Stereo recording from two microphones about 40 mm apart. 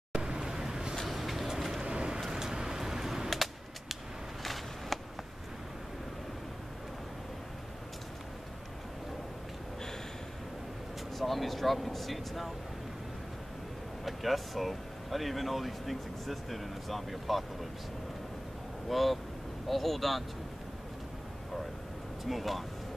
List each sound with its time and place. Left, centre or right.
0.1 s vehicle: centre
1.0 s vehicle: centre
1.8 s vehicle: right
2.1 s vehicle: centre
3.9 s a sound: centre
11.1 s speech: centre
14.0 s speech: centre
18.9 s speech: centre
22.2 s speech: centre